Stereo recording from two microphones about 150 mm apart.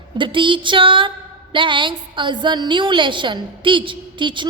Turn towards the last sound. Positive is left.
turn(degrees=-30)  # may be behind; listen again after turning